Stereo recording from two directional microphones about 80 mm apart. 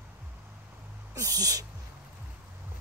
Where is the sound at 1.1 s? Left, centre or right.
Right.